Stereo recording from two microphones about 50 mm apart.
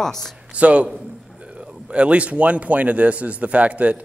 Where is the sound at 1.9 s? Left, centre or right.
Right.